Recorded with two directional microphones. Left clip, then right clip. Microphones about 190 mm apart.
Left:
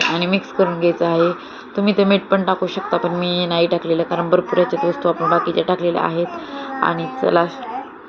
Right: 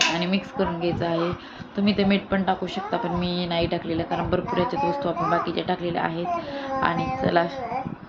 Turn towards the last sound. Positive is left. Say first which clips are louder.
# left 6 dB
turn(degrees=-10)  # may be behind; listen again after turning